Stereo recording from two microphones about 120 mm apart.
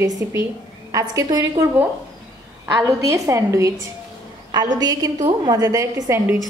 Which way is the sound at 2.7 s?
25° right (ahead or behind).